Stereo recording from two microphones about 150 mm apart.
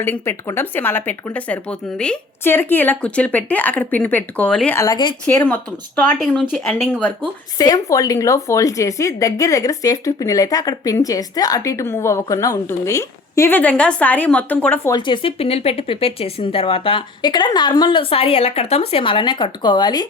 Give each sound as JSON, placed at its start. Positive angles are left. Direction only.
{"t": 0.0, "sound": "speech", "side_deg": 15}
{"t": 4.8, "sound": "a woman's voice", "side_deg": 25}
{"t": 5.2, "sound": "speech", "side_deg": 10}
{"t": 6.1, "sound": "speech", "side_deg": -5}
{"t": 7.6, "sound": "a woman's voice", "side_deg": 25}
{"t": 14.9, "sound": "speech", "side_deg": 35}